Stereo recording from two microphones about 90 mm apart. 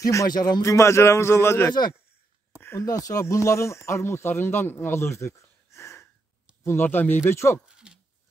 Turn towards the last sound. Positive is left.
turn(degrees=30)  # may be behind; listen again after turning